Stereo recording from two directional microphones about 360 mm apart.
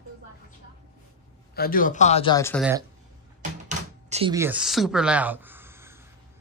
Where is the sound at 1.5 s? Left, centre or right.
Left; by 2.7 s centre.